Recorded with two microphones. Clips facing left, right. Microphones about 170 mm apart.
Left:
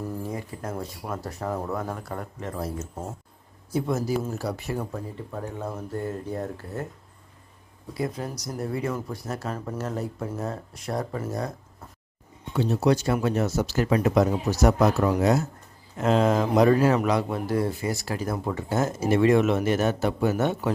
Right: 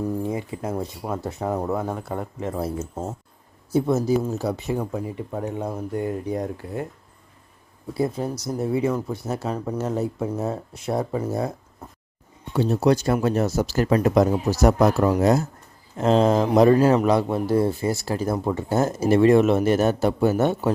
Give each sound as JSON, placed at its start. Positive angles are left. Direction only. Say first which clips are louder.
{"t": 0.3, "sound": "speech", "louder": "right 5 dB", "side_deg": -20}
{"t": 7.9, "sound": "speech", "louder": "right 5 dB", "side_deg": -25}
{"t": 9.8, "sound": "speech", "louder": "right 6 dB", "side_deg": -5}
{"t": 10.2, "sound": "speech", "louder": "right 5 dB", "side_deg": -20}
{"t": 12.5, "sound": "a man's voice", "louder": "right 3 dB", "side_deg": -40}